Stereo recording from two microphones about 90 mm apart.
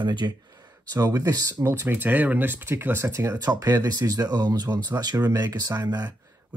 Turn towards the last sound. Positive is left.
turn(degrees=-40)  # may be behind; listen again after turning